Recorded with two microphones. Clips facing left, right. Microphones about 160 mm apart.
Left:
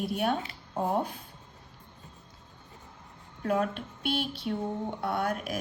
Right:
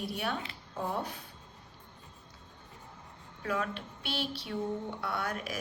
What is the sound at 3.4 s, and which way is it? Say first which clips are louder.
A woman's voice: left 6 dB; 45° left (ahead or behind).